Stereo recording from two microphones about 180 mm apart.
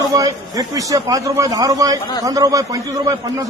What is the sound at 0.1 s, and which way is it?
A man's voice, 20° right (ahead or behind).